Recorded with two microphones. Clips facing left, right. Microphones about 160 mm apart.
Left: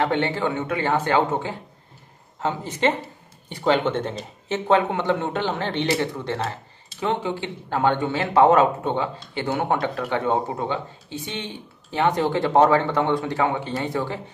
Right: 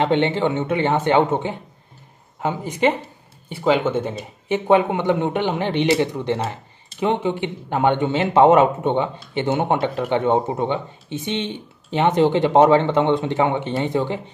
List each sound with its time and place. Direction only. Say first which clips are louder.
0.0 s speech: right 4 dB; 20° right (ahead or behind)